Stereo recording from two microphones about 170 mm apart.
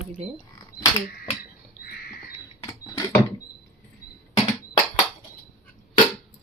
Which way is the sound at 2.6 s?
20° left (ahead or behind).